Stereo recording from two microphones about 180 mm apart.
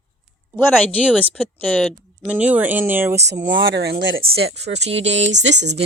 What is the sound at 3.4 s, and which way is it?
Speech, 85° right.